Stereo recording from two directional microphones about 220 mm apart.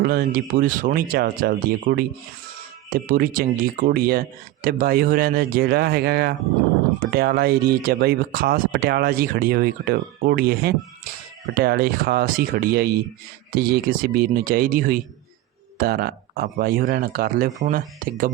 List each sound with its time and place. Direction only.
0.0 s speech: 45° right (ahead or behind)